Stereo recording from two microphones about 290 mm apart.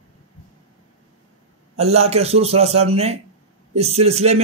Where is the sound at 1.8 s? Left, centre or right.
Right.